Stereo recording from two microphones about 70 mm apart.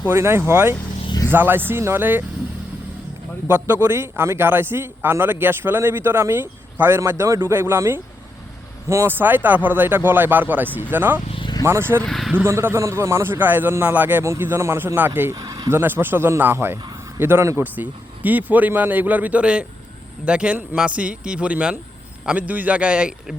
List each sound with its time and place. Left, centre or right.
0.0 s a man's voice: right
3.5 s a man's voice: right
7.0 s a man's voice: right
9.0 s speech: right
11.6 s a man's voice: right
12.0 s speech: centre
12.5 s a man's voice: right
13.3 s speech: right
14.3 s a man's voice: right
14.9 s a man's voice: right
15.4 s a sound: right
15.7 s a man's voice: right
17.6 s a man's voice: right